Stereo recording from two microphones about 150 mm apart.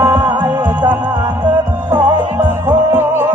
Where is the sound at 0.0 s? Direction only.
25° right (ahead or behind).